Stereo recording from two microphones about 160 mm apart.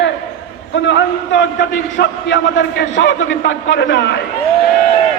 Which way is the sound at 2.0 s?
90° left.